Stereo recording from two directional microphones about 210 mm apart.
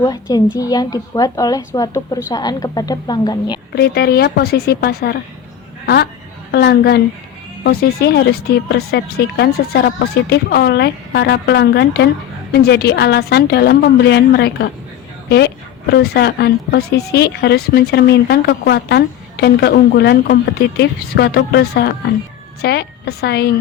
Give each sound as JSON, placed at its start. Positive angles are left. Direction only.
{"t": 0.0, "sound": "a woman's voice", "side_deg": 20}
{"t": 3.8, "sound": "a woman's voice", "side_deg": 50}